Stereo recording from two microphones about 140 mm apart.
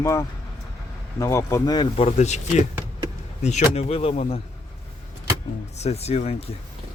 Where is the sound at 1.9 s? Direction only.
50° left (ahead or behind).